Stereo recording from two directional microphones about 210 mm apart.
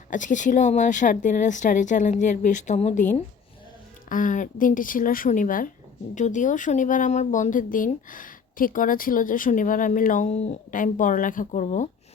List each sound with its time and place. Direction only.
0.1 s speech: 35° left (ahead or behind)